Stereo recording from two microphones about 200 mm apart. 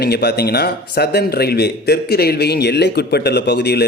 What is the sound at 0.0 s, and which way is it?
Speech, 55° left (ahead or behind).